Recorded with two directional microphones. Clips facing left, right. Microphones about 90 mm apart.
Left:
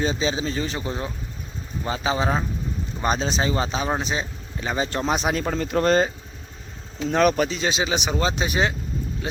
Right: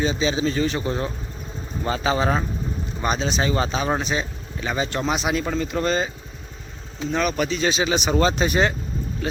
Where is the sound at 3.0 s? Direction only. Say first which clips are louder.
Even; 30° left (ahead or behind); by 6.1 s 50° left (ahead or behind).